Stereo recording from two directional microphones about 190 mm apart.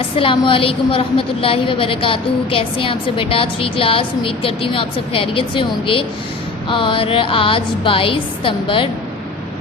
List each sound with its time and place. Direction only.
0.2 s a woman's voice: 25° left (ahead or behind)